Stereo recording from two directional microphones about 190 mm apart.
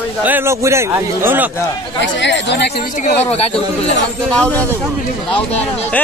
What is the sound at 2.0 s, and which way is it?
Speech, 70° left (ahead or behind).